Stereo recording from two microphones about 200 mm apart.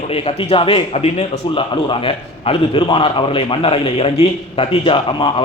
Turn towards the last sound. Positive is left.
turn(degrees=25)  # may be behind; listen again after turning